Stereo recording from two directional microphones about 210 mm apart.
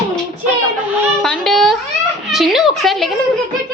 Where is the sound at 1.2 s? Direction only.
5° left (ahead or behind).